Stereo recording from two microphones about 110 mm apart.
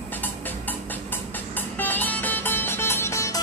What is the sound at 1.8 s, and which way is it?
Music, 15° left (ahead or behind).